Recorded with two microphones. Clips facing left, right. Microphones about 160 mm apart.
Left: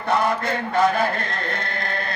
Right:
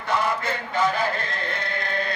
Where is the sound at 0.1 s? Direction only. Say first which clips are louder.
Left 3 dB; 60° left (ahead or behind).